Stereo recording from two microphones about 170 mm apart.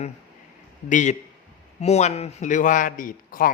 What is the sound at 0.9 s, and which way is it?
A man's voice, 45° left (ahead or behind).